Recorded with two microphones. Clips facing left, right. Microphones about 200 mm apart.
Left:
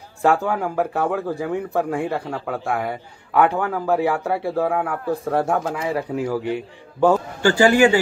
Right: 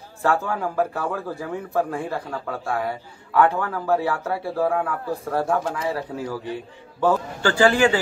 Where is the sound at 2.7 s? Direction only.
15° left (ahead or behind).